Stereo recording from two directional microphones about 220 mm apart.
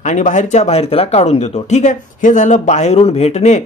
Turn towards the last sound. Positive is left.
turn(degrees=30)  # may be behind; listen again after turning